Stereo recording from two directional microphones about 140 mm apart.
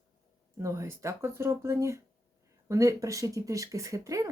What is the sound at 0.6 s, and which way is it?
Speech, 20° right (ahead or behind).